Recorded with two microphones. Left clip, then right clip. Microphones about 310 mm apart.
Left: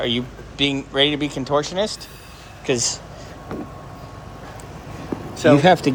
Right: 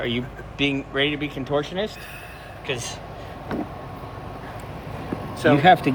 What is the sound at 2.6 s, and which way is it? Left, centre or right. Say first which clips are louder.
Speech: left 7 dB; left.